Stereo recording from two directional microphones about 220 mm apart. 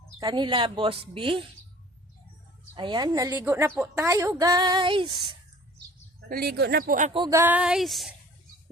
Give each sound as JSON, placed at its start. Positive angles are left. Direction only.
{"t": 0.2, "sound": "speech", "side_deg": -20}
{"t": 2.7, "sound": "a woman's voice", "side_deg": -20}
{"t": 6.2, "sound": "speech", "side_deg": -45}
{"t": 7.2, "sound": "speech", "side_deg": -15}